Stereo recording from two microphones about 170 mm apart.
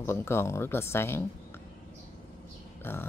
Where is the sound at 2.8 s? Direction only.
15° left (ahead or behind).